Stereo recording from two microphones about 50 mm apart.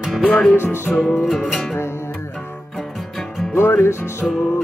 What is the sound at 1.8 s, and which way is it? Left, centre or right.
Music, left.